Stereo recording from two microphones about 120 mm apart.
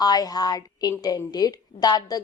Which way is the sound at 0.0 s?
35° left (ahead or behind).